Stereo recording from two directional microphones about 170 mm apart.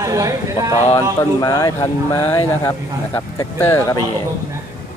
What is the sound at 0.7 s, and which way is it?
Speech, 40° left (ahead or behind).